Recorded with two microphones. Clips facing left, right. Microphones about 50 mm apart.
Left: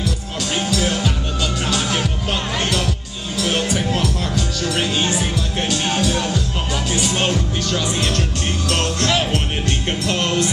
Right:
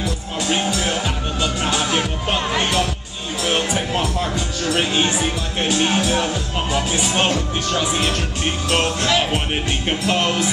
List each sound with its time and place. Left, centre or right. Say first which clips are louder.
0.5 s music: even; right